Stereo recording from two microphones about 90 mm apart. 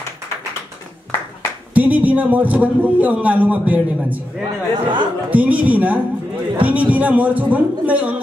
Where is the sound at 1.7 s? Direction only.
15° right (ahead or behind).